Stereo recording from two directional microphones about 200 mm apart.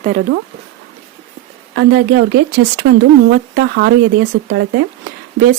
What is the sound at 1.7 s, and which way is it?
Speech, 65° right (ahead or behind).